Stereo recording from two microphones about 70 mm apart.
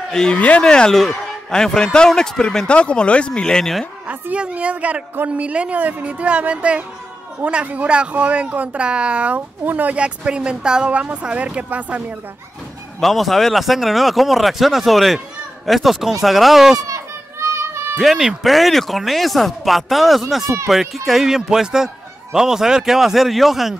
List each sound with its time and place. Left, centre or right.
0.1 s a man's voice: centre
4.1 s a woman's voice: centre
13.0 s speech: centre
16.8 s children playing: right
17.9 s speech: centre